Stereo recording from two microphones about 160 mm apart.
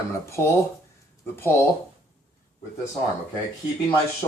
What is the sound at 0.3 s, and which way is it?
Speech, 15° left (ahead or behind).